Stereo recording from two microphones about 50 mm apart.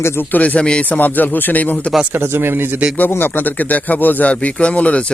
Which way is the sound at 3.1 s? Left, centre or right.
Left.